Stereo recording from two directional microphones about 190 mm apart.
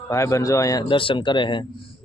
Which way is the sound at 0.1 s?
15° left (ahead or behind).